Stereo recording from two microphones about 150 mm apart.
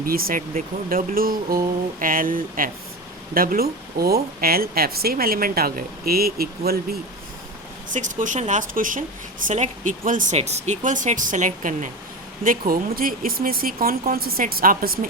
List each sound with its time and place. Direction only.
0.0 s speech: 75° right (ahead or behind)
7.9 s a woman's voice: 55° right (ahead or behind)
12.5 s speech: 70° right (ahead or behind)